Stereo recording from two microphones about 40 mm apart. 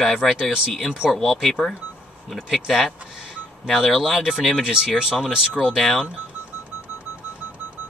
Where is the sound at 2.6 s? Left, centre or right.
Centre.